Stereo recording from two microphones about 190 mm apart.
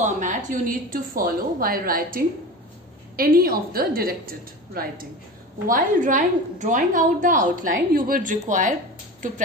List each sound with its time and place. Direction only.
0.0 s a woman's voice: 40° right (ahead or behind)